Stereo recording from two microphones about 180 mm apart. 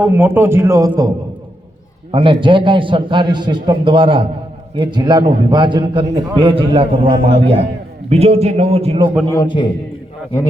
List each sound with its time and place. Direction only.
0.0 s a man's voice: 10° right (ahead or behind)
2.1 s a man's voice: 25° right (ahead or behind)
9.3 s a man's voice: 25° left (ahead or behind)